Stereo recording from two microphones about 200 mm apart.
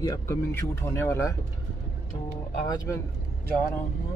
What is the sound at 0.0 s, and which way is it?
Speech, 15° left (ahead or behind).